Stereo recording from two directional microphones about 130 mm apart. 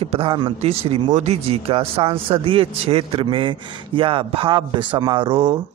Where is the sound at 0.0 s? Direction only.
45° right (ahead or behind).